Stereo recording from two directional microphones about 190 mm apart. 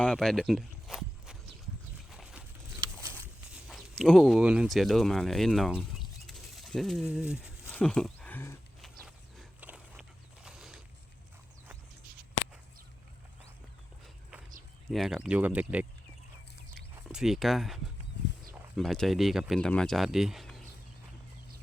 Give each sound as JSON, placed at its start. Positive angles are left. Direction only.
{"t": 0.0, "sound": "speech", "side_deg": 5}
{"t": 2.0, "sound": "dog", "side_deg": 0}
{"t": 3.7, "sound": "speech", "side_deg": 0}
{"t": 7.6, "sound": "a sound", "side_deg": 10}
{"t": 8.8, "sound": "a sound", "side_deg": 0}
{"t": 14.8, "sound": "speech", "side_deg": 0}
{"t": 16.9, "sound": "a sound", "side_deg": -5}
{"t": 18.2, "sound": "livestock", "side_deg": 65}
{"t": 18.5, "sound": "speech", "side_deg": 0}